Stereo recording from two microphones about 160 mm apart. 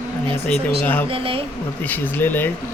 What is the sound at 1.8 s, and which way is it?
Speech, 10° left (ahead or behind).